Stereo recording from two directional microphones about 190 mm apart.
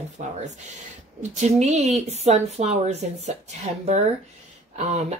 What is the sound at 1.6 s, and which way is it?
Speech, 35° right (ahead or behind).